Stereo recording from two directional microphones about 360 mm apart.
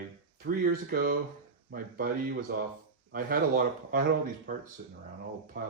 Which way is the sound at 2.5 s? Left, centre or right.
Right.